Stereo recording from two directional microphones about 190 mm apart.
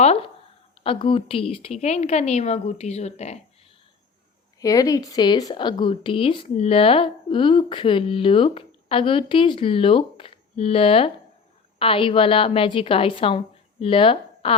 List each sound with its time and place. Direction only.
0.0 s a sound: 35° left (ahead or behind)
0.9 s a woman's voice: 30° left (ahead or behind)
4.6 s speech: 20° left (ahead or behind)